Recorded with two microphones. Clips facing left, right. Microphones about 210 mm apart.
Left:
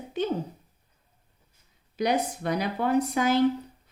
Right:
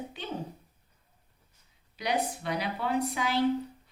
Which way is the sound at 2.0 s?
45° left (ahead or behind).